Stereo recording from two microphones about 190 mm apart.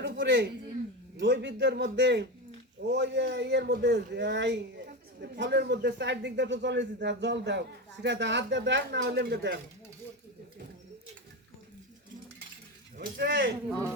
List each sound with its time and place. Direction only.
0.0 s a sound: 70° right (ahead or behind)
1.2 s a man's voice: 65° right (ahead or behind)
13.0 s speech: 60° right (ahead or behind)
13.7 s speech: 5° left (ahead or behind)